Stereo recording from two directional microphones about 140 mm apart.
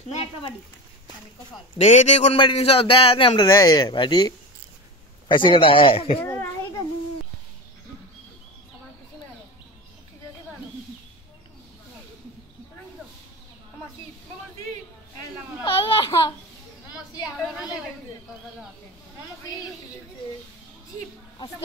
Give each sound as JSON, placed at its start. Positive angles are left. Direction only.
{"t": 1.8, "sound": "a man's voice", "side_deg": 55}
{"t": 5.3, "sound": "a man's voice", "side_deg": 35}
{"t": 6.2, "sound": "children playing", "side_deg": 15}
{"t": 15.6, "sound": "a sound", "side_deg": 40}
{"t": 17.5, "sound": "chatter", "side_deg": -5}